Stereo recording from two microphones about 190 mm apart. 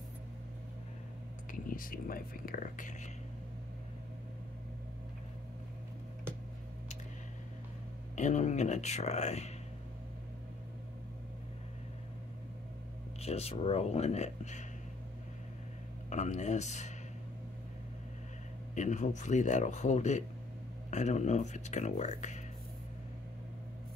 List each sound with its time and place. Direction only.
1.5 s speech: 45° left (ahead or behind)
8.2 s speech: 40° left (ahead or behind)
13.2 s speech: 35° left (ahead or behind)
16.1 s speech: 40° left (ahead or behind)
18.8 s speech: 40° left (ahead or behind)